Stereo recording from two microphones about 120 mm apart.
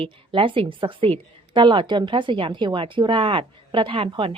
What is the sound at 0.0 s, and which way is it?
A woman's voice, 45° right (ahead or behind).